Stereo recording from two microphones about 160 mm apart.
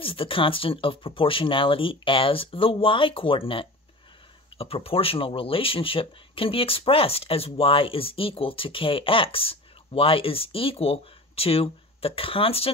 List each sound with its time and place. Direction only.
0.0 s speech: 35° left (ahead or behind)